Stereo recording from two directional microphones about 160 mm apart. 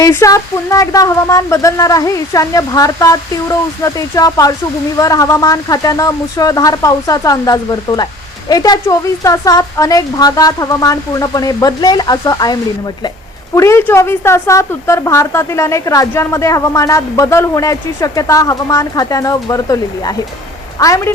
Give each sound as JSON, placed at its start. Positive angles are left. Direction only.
{"t": 0.0, "sound": "a woman's voice", "side_deg": 20}
{"t": 13.6, "sound": "a woman's voice", "side_deg": 15}